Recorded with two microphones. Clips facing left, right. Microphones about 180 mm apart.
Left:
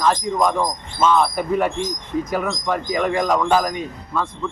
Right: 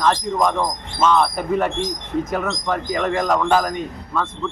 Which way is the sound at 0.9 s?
Centre (ahead or behind).